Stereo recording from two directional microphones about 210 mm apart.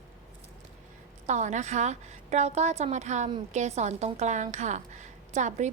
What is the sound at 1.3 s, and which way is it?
A woman's voice, 35° right (ahead or behind).